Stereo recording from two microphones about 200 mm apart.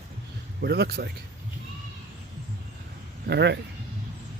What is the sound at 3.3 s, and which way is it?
Speech, 60° right (ahead or behind).